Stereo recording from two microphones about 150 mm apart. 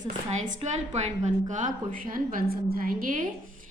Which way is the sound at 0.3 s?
55° right (ahead or behind).